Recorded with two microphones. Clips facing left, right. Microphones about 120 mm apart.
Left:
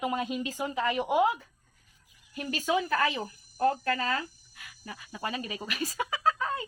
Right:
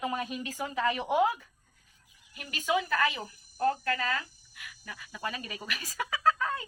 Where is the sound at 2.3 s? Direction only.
35° left (ahead or behind); by 6.6 s 20° left (ahead or behind).